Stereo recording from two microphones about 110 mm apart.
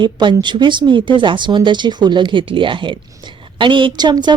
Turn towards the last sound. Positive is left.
turn(degrees=-40)  # may be behind; listen again after turning